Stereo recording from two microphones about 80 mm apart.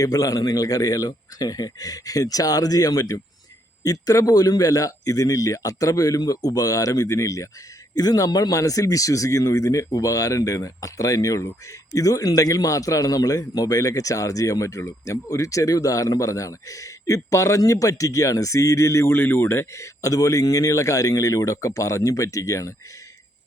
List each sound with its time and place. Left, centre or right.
0.0 s a man's voice: left
7.9 s a man's voice: left